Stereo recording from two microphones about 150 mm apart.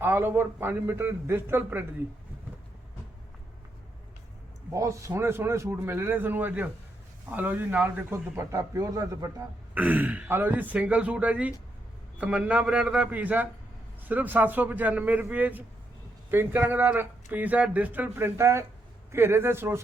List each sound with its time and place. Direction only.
0.0 s a man's voice: 15° right (ahead or behind)
4.7 s a man's voice: 20° right (ahead or behind)
9.7 s a man's voice: 10° right (ahead or behind)